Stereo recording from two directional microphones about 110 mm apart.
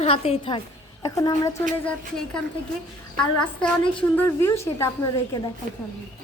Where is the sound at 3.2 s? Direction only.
10° left (ahead or behind).